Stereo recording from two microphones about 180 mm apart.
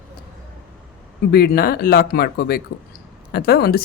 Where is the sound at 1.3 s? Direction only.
60° left (ahead or behind).